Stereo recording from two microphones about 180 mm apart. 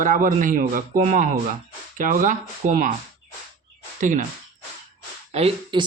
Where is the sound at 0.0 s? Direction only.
45° right (ahead or behind).